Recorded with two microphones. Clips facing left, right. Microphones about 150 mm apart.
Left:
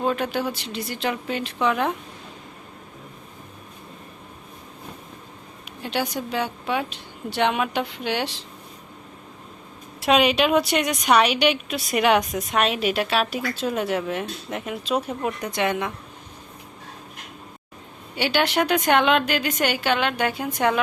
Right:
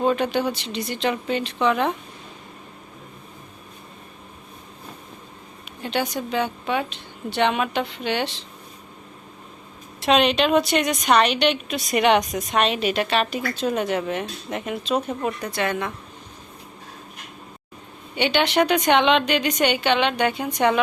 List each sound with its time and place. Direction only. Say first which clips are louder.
0.0 s a woman's voice: right 3 dB; 5° left (ahead or behind)
5.8 s a woman's voice: right 1 dB; 10° left (ahead or behind)
10.0 s a woman's voice: even; 10° left (ahead or behind)
18.2 s a woman's voice: right 2 dB; 5° left (ahead or behind)